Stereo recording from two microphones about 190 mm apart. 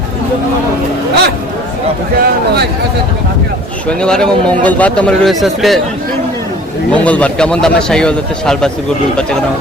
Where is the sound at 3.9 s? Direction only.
5° left (ahead or behind).